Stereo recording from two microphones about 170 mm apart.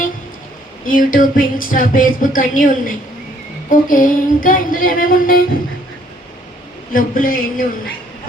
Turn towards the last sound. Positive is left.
turn(degrees=60)  # may be behind; listen again after turning